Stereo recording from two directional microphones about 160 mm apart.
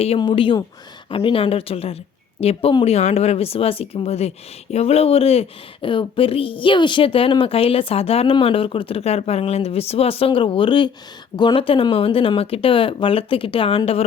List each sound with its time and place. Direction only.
0.2 s speech: 30° left (ahead or behind)